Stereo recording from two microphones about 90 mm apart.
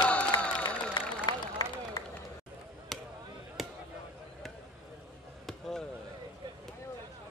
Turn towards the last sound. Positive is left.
turn(degrees=5)  # may be behind; listen again after turning